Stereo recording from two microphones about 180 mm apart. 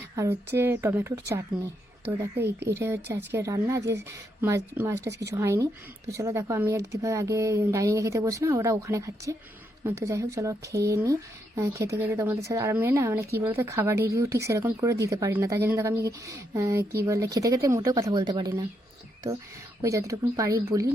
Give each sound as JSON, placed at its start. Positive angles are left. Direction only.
{"t": 0.2, "sound": "speech", "side_deg": -15}
{"t": 2.6, "sound": "speech", "side_deg": -15}
{"t": 19.8, "sound": "speech", "side_deg": -15}